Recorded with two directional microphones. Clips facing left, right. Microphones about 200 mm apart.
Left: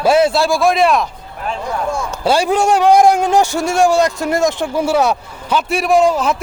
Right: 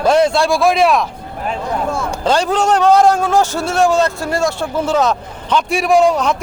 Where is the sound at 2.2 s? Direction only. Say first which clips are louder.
Left 1 dB; 10° left (ahead or behind).